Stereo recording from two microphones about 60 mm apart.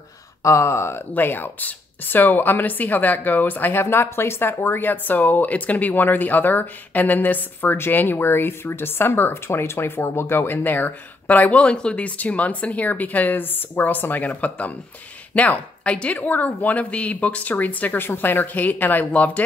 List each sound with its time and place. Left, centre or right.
0.4 s speech: left
3.8 s speech: left